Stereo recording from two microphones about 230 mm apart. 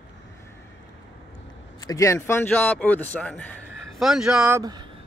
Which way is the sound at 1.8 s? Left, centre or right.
Centre.